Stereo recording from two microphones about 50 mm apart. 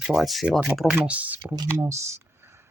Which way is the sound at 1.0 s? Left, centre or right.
Right.